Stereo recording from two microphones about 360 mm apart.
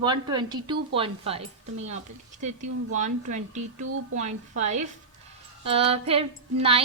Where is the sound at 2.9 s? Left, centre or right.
Centre.